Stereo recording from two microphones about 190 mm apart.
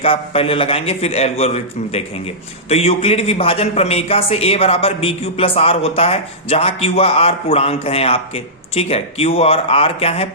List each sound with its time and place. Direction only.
0.0 s a man's voice: 30° left (ahead or behind)